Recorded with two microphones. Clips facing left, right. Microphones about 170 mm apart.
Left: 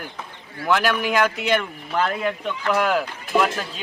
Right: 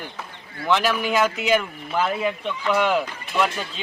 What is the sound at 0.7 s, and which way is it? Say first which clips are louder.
Speech: even; centre (ahead or behind).